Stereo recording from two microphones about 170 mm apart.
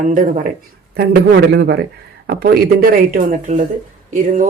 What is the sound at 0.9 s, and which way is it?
A man's voice, 70° right (ahead or behind).